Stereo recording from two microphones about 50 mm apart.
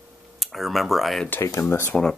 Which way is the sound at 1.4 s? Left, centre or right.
Left.